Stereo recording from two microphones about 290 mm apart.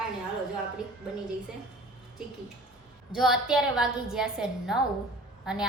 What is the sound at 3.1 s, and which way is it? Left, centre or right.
A woman's voice, centre.